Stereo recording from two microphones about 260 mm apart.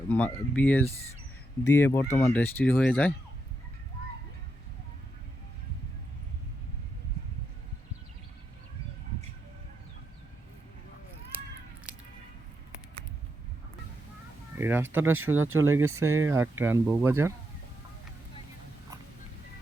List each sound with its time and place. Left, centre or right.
0.1 s speech: centre
14.5 s speech: centre
15.4 s speech: right
16.0 s speech: centre